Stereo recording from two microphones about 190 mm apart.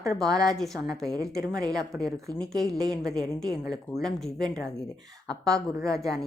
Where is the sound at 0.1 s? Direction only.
Centre (ahead or behind).